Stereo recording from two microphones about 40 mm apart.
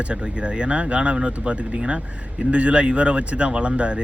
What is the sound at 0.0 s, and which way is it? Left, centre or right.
Speech, right.